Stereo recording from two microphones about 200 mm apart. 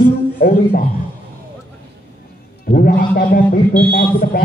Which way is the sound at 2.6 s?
45° left (ahead or behind).